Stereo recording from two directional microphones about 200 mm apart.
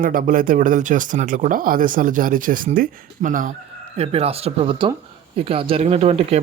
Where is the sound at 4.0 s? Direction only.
30° right (ahead or behind).